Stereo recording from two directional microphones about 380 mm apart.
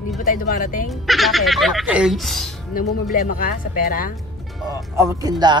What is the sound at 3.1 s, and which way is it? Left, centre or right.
Speech, left.